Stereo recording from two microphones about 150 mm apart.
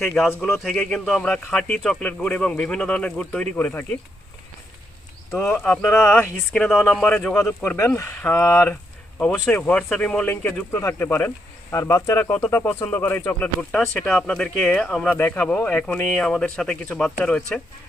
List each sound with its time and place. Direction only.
0.3 s a man's voice: 5° left (ahead or behind)
5.3 s speech: 10° left (ahead or behind)